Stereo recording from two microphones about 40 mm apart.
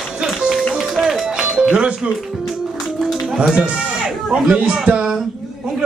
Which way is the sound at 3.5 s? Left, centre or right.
Right.